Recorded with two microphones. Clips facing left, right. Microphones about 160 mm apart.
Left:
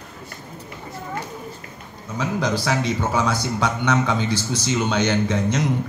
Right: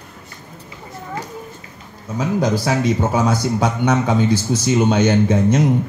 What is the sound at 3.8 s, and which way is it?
A man's voice, 45° right (ahead or behind).